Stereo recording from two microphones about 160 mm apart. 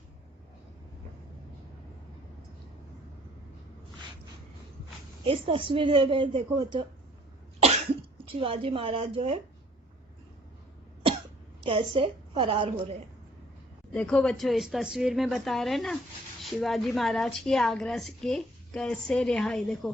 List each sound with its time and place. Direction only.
5.2 s a woman's voice: 35° right (ahead or behind)
8.3 s a woman's voice: 35° right (ahead or behind)
11.6 s a woman's voice: 30° right (ahead or behind)
13.9 s a woman's voice: 5° left (ahead or behind)